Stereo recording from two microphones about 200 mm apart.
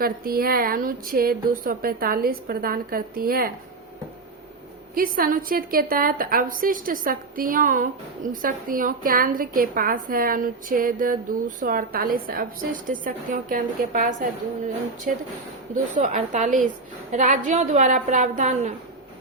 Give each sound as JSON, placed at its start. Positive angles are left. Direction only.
{"t": 0.0, "sound": "a woman's voice", "side_deg": -50}
{"t": 4.9, "sound": "a woman's voice", "side_deg": -45}